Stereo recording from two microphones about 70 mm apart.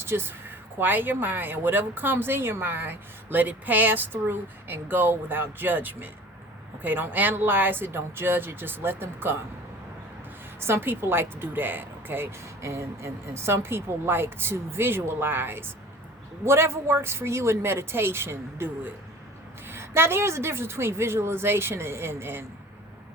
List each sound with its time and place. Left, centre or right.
0.0 s speech: right
10.6 s speech: right